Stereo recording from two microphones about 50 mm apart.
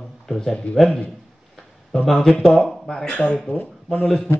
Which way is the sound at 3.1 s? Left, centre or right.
Left.